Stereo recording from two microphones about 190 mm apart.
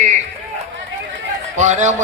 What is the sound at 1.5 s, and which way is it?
Speech, 40° right (ahead or behind).